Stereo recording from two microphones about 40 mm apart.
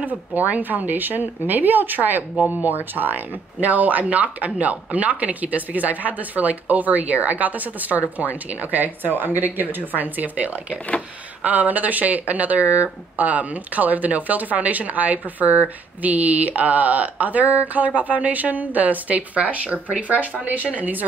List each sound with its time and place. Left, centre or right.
0.3 s speech: right